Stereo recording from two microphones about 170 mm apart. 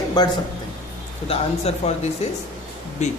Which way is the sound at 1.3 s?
40° left (ahead or behind).